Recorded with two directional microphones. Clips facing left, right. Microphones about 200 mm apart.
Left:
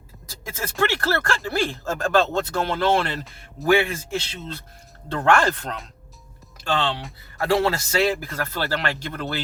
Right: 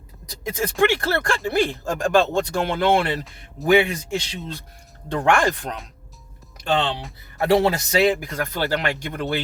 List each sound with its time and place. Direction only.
0.3 s speech: 20° right (ahead or behind)